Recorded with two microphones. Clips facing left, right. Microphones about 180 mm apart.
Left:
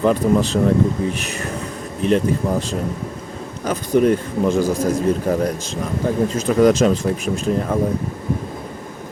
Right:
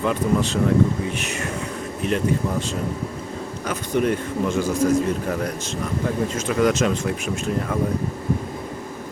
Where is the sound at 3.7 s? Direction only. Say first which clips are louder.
Left 6 dB; 35° left (ahead or behind).